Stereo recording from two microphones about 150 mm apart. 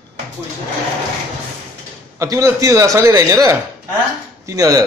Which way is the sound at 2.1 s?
20° right (ahead or behind).